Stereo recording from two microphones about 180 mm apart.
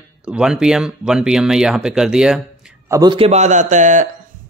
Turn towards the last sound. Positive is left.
turn(degrees=-45)  # may be behind; listen again after turning